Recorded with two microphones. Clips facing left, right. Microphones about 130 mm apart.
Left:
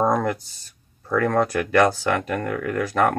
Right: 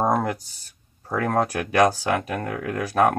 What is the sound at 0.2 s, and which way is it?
Speech, 15° right (ahead or behind).